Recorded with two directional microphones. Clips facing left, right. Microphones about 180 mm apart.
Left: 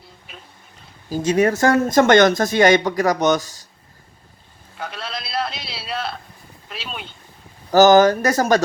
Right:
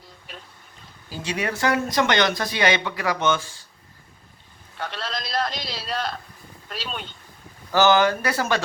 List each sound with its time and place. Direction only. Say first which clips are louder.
1.1 s speech: left 11 dB; 45° left (ahead or behind)
4.8 s a sound: even; 10° left (ahead or behind)
6.7 s speech: even; 5° left (ahead or behind)
7.7 s speech: left 7 dB; 40° left (ahead or behind)